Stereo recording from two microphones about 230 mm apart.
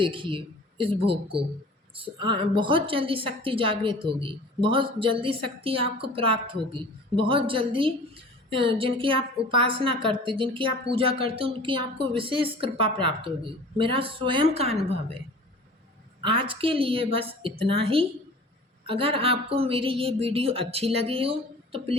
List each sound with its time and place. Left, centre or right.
0.0 s a woman's voice: right
16.2 s a woman's voice: right